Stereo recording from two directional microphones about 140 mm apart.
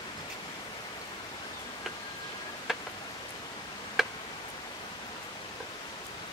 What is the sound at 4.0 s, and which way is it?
Tick, centre (ahead or behind).